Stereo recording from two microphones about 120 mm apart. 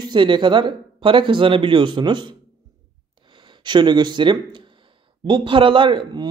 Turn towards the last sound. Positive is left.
turn(degrees=-40)  # may be behind; listen again after turning